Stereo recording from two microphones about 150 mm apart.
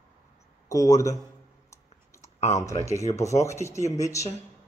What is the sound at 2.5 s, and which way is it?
Speech, 20° left (ahead or behind).